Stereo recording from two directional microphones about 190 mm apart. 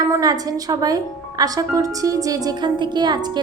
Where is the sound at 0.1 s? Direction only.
20° right (ahead or behind).